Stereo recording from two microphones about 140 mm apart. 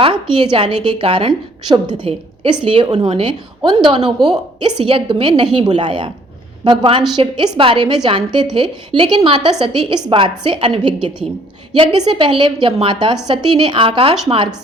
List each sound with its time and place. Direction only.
0.0 s a woman's voice: 35° right (ahead or behind)